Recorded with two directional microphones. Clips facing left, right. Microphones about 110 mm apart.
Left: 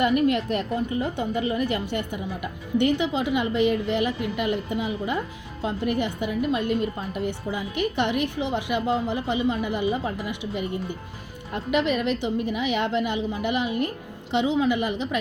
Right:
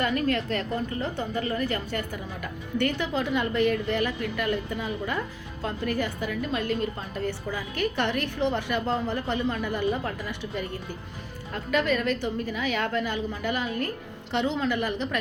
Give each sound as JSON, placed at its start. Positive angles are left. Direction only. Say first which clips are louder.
{"t": 0.0, "sound": "a woman's voice", "louder": "left 5 dB", "side_deg": 20}